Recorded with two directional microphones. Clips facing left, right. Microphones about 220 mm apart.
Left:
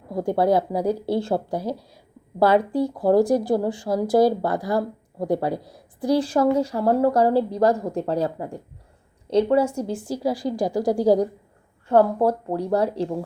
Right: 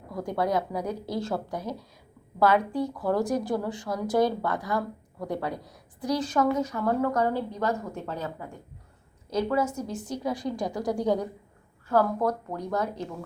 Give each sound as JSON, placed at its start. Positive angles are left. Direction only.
{"t": 0.1, "sound": "speech", "side_deg": 30}